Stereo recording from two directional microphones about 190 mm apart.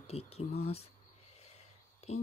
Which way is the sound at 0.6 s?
30° left (ahead or behind).